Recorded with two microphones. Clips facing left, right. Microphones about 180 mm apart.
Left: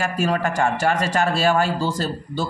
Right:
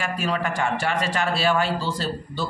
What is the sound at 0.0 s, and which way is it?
A man's voice, 45° left (ahead or behind).